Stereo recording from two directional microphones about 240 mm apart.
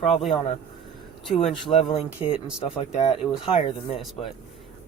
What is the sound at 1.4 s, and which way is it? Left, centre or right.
Speech, left.